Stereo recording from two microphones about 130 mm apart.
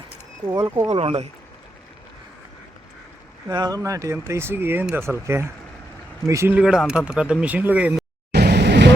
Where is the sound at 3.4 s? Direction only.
30° right (ahead or behind).